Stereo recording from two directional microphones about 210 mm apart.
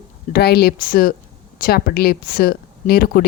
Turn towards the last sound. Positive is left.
turn(degrees=45)  # may be behind; listen again after turning